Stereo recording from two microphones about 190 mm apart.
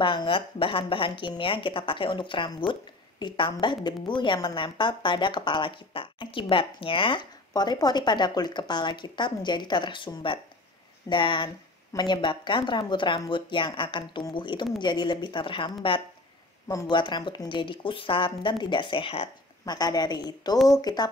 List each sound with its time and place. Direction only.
0.0 s a woman's voice: 25° left (ahead or behind)